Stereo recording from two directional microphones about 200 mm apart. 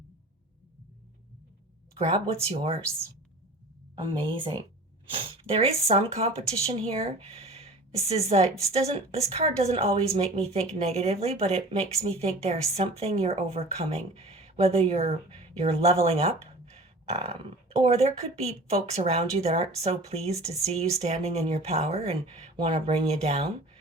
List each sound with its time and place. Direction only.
2.0 s speech: 30° right (ahead or behind)
3.9 s speech: 25° right (ahead or behind)